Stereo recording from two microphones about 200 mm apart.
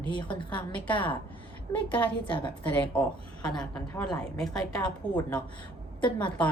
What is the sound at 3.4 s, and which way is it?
A woman's voice, 5° left (ahead or behind).